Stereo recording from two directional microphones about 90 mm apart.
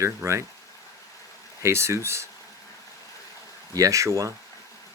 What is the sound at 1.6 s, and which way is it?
Speech, 30° right (ahead or behind).